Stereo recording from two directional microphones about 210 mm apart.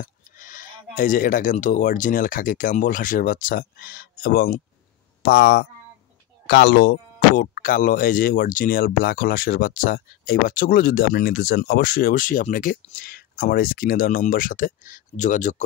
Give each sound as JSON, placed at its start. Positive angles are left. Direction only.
{"t": 0.0, "sound": "speech", "side_deg": 40}